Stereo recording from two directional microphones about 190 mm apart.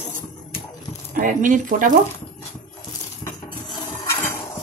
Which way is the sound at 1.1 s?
45° right (ahead or behind).